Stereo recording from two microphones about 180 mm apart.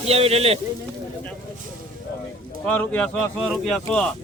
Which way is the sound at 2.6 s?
10° left (ahead or behind).